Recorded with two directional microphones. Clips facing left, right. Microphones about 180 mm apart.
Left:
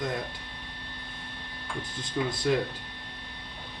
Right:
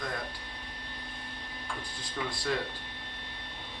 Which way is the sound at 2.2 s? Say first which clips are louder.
Left 7 dB; 15° left (ahead or behind).